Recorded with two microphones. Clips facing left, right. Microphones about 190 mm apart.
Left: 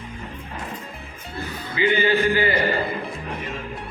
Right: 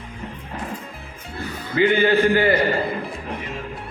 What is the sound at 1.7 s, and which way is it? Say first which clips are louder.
Speech: right 3 dB; 55° right (ahead or behind).